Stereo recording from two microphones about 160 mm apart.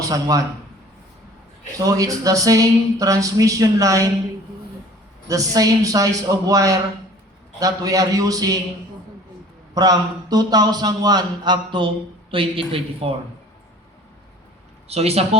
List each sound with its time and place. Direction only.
0.0 s speech: 20° right (ahead or behind)
1.8 s speech: 20° right (ahead or behind)
5.5 s speech: 20° right (ahead or behind)
9.7 s speech: 25° right (ahead or behind)
14.8 s speech: 40° right (ahead or behind)